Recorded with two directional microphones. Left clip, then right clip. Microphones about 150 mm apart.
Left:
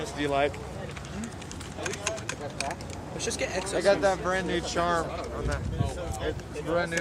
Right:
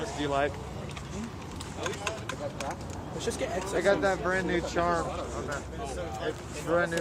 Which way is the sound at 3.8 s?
25° left (ahead or behind).